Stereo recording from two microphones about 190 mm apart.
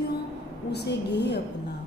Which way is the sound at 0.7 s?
60° left (ahead or behind).